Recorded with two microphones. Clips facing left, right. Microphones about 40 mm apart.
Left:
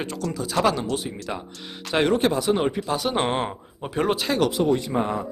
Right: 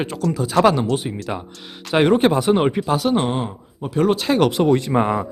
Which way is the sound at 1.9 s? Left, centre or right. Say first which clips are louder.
Right 5 dB; right.